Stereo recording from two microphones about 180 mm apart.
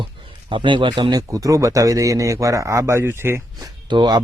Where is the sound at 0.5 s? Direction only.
25° right (ahead or behind).